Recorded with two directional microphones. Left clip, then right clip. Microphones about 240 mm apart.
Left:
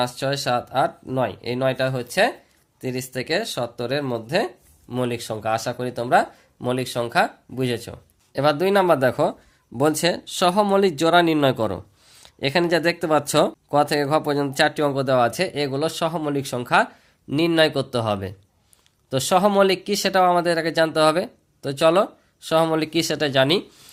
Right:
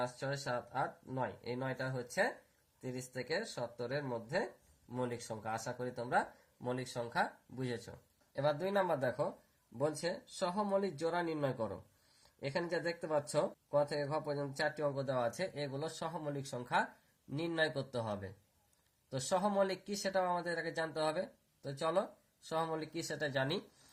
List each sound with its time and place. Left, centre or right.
0.2 s speech: left